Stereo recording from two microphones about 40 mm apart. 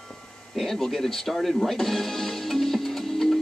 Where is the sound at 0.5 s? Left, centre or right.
Centre.